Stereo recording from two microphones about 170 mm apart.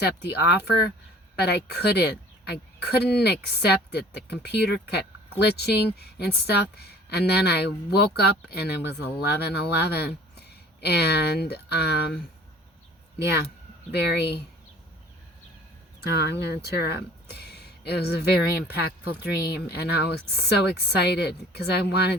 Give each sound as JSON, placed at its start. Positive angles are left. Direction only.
{"t": 0.0, "sound": "speech", "side_deg": 75}
{"t": 9.2, "sound": "speech", "side_deg": 70}
{"t": 13.9, "sound": "speech", "side_deg": 80}
{"t": 16.1, "sound": "speech", "side_deg": 80}